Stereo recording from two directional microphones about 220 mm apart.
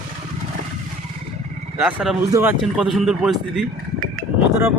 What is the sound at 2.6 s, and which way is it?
Speech, centre (ahead or behind).